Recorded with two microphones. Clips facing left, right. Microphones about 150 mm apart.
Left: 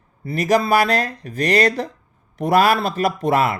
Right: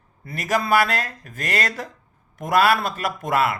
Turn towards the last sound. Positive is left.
turn(degrees=40)  # may be behind; listen again after turning